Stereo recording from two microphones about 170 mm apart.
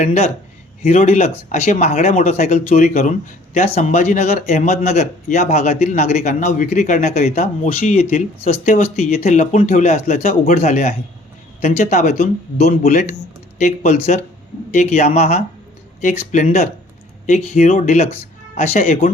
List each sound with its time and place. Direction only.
0.0 s speech: 40° left (ahead or behind)
13.6 s speech: 40° left (ahead or behind)